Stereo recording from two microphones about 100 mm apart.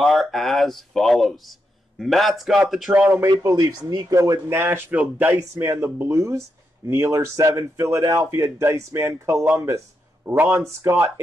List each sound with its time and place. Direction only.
0.0 s speech: centre (ahead or behind)
3.1 s a man's voice: 30° right (ahead or behind)
5.3 s a man's voice: 30° right (ahead or behind)